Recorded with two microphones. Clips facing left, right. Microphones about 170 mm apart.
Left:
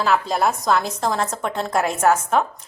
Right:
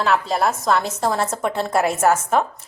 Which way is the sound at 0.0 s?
Centre (ahead or behind).